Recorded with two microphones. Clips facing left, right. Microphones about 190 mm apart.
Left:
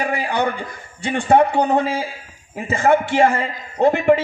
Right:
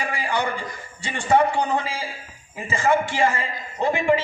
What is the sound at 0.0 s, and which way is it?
A man's voice, 55° left (ahead or behind).